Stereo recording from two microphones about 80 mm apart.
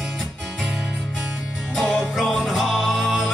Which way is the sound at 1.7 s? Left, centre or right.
Centre.